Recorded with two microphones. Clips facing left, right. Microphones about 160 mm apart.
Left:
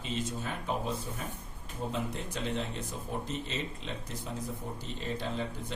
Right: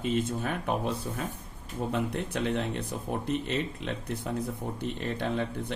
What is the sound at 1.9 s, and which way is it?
Speech, 60° right (ahead or behind).